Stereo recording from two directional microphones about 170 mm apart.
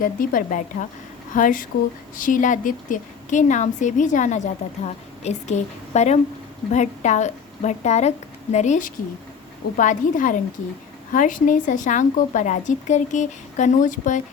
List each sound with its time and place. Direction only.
0.0 s a woman's voice: 55° left (ahead or behind)